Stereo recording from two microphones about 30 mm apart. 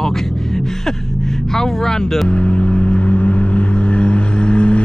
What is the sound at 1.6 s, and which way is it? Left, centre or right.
Speech, centre.